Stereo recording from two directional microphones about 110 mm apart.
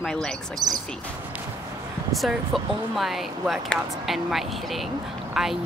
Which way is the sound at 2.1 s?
Centre (ahead or behind).